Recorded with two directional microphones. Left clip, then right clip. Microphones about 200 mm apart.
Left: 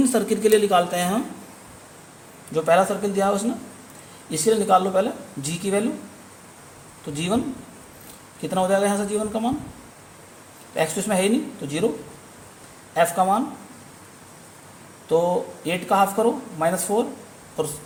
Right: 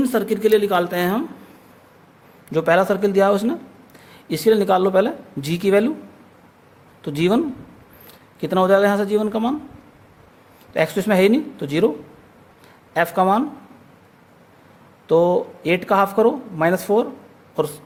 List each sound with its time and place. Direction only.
0.0 s a woman's voice: 30° right (ahead or behind)
2.5 s speech: 50° right (ahead or behind)
7.0 s speech: 55° right (ahead or behind)
8.4 s speech: 50° right (ahead or behind)
10.8 s speech: 50° right (ahead or behind)
12.9 s speech: 50° right (ahead or behind)
15.0 s speech: 55° right (ahead or behind)